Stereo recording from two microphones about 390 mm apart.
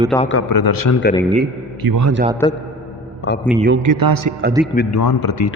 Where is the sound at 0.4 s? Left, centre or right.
Left.